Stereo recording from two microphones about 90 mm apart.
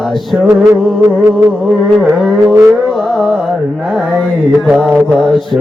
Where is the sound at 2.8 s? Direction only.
Centre (ahead or behind).